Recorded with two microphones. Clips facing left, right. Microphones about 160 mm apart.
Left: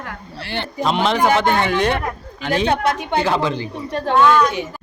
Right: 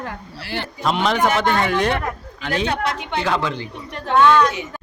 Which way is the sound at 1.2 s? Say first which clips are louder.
Left 2 dB; 30° left (ahead or behind).